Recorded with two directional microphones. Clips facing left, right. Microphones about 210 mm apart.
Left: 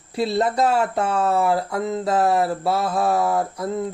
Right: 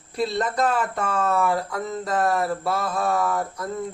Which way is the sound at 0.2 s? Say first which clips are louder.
Left 3 dB; 25° left (ahead or behind).